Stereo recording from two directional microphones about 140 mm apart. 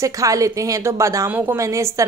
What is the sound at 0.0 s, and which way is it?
Speech, 25° right (ahead or behind).